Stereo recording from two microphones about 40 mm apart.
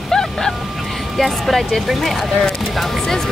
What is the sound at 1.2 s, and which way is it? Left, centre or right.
Speech, centre.